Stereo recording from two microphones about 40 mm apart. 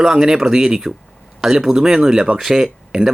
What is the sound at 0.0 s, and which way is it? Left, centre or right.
Speech, centre.